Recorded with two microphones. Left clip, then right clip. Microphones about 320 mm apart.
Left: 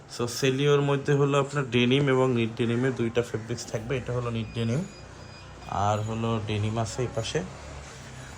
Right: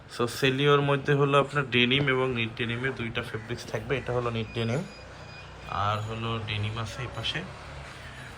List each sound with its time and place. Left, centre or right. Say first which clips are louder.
0.2 s a man's voice: right 1 dB; centre